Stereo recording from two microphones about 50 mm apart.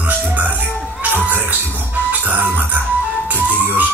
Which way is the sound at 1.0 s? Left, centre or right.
Right.